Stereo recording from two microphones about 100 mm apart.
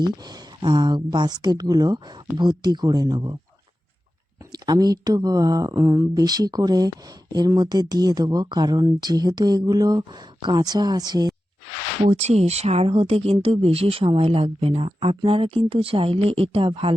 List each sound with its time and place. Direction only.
0.0 s speech: 45° right (ahead or behind)
4.5 s speech: 40° right (ahead or behind)
12.1 s speech: 90° right; by 16.9 s 65° right (ahead or behind)